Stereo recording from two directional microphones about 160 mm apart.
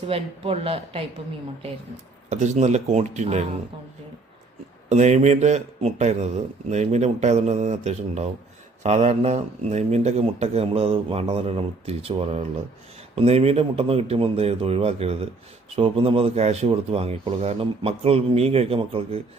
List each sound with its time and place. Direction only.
0.1 s speech: 35° right (ahead or behind)
2.3 s a man's voice: 45° right (ahead or behind)
4.9 s a man's voice: 45° right (ahead or behind)